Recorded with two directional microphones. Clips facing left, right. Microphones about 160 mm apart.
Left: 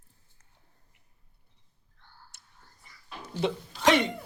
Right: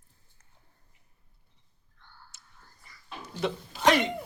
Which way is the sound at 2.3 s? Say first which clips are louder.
Right 1 dB; 60° left (ahead or behind).